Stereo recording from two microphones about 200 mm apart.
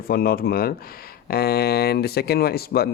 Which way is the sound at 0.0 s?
50° left (ahead or behind).